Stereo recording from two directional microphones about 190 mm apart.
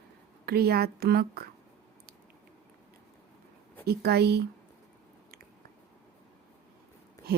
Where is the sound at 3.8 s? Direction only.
60° right (ahead or behind).